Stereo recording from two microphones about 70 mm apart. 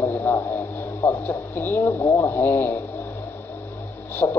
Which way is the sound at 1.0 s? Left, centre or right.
Left.